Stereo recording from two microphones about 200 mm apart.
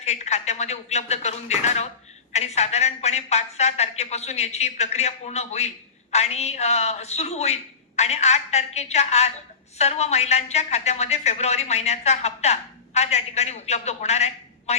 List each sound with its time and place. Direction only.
0.0 s a woman's voice: 35° left (ahead or behind)